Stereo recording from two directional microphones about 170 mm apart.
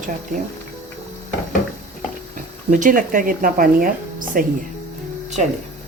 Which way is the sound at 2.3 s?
50° right (ahead or behind).